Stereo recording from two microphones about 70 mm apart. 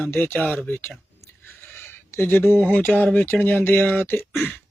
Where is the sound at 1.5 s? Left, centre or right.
Left.